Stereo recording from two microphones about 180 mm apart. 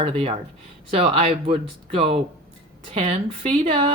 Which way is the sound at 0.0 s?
30° right (ahead or behind).